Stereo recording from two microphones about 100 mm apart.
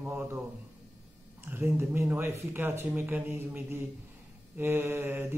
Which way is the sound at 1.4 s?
20° right (ahead or behind).